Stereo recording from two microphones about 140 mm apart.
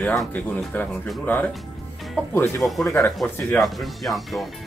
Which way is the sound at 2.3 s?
15° left (ahead or behind).